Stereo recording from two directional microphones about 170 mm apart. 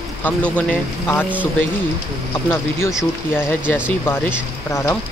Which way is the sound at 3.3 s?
10° left (ahead or behind).